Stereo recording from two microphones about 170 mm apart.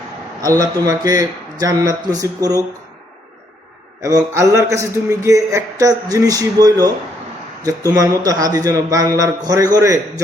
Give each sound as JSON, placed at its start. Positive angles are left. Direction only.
{"t": 0.6, "sound": "a man's voice", "side_deg": -20}
{"t": 4.0, "sound": "a man's voice", "side_deg": -20}